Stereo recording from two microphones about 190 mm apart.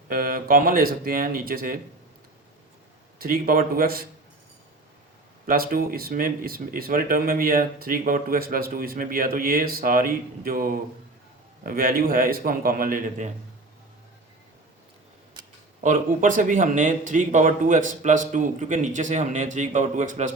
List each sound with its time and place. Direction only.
0.1 s speech: 50° right (ahead or behind)
3.2 s speech: 50° right (ahead or behind)
5.5 s speech: 50° right (ahead or behind)
15.8 s speech: 40° right (ahead or behind)